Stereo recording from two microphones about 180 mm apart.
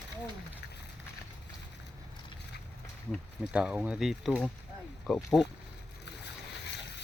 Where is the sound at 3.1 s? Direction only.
5° right (ahead or behind).